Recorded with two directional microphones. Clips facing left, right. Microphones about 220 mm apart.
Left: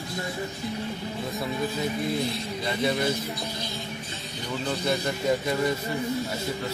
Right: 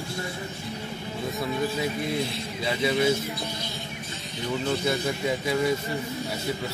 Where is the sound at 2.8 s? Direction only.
5° right (ahead or behind).